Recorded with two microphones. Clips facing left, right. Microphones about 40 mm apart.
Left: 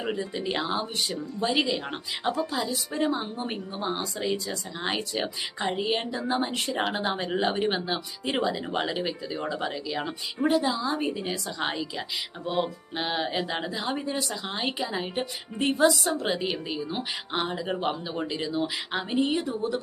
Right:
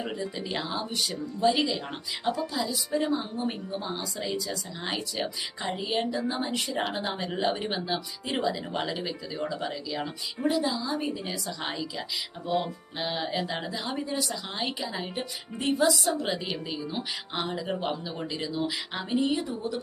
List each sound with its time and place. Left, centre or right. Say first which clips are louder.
0.0 s speech: left 3 dB; left
2.5 s speech: right 1 dB; left
6.6 s speech: left 2 dB; left; by 15.2 s centre
15.5 s speech: left 2 dB; left
16.2 s speech: left 3 dB; centre
19.4 s speech: left 3 dB; left